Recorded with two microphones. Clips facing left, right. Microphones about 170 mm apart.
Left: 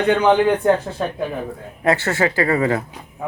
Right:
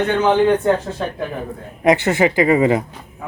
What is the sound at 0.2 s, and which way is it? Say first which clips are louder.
Speech: right 1 dB; 10° left (ahead or behind).